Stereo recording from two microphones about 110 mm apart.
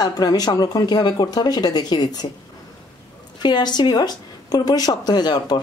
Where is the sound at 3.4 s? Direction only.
40° left (ahead or behind).